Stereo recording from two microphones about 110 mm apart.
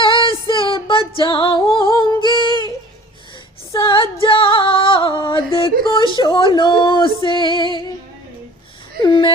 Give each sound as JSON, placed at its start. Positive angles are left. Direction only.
{"t": 0.0, "sound": "female singing", "side_deg": 50}
{"t": 3.8, "sound": "female singing", "side_deg": 50}
{"t": 5.5, "sound": "a sound", "side_deg": 50}
{"t": 6.1, "sound": "female singing", "side_deg": 45}
{"t": 9.0, "sound": "whimper", "side_deg": 50}